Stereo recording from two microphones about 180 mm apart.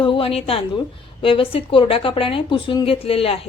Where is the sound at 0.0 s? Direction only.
30° left (ahead or behind).